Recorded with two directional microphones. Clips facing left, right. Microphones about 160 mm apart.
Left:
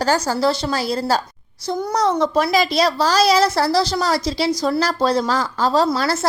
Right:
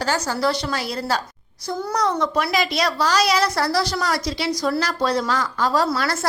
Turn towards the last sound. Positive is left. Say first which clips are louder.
# left 4 dB
turn(degrees=30)  # may be behind; listen again after turning